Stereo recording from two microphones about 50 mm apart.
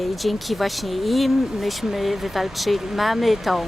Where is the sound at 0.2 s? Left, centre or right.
Centre.